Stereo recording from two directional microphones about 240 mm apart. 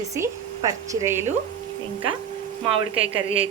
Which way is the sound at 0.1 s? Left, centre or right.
Centre.